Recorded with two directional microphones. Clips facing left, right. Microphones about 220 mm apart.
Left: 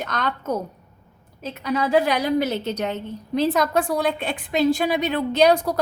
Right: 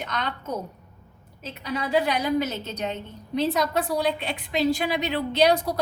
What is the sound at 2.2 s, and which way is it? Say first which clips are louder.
Speech: left 4 dB; 65° left (ahead or behind).